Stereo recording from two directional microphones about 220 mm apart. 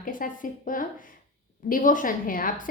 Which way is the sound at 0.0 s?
35° left (ahead or behind).